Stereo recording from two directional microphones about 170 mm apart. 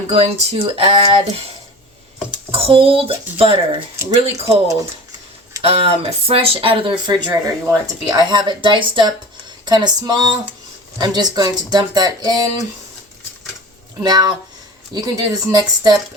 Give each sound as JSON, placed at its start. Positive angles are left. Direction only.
{"t": 0.1, "sound": "speech", "side_deg": -35}
{"t": 2.5, "sound": "speech", "side_deg": -35}
{"t": 5.6, "sound": "speech", "side_deg": -35}
{"t": 14.0, "sound": "speech", "side_deg": -25}